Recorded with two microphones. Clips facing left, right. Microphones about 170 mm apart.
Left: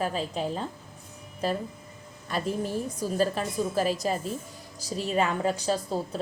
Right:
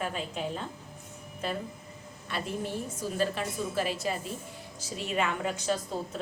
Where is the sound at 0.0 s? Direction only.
35° left (ahead or behind).